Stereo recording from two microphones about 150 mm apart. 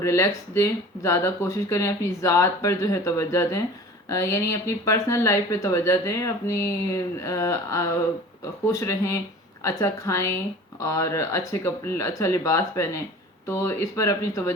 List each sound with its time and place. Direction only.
0.0 s a woman's voice: 20° left (ahead or behind)